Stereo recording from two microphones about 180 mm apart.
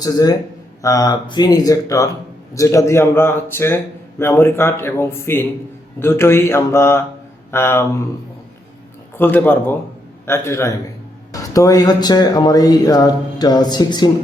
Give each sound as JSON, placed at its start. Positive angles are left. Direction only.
{"t": 0.0, "sound": "a man's voice", "side_deg": 20}
{"t": 9.1, "sound": "a man's voice", "side_deg": 10}